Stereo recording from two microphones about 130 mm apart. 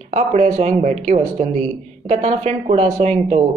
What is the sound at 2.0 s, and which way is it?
Speech, 55° right (ahead or behind).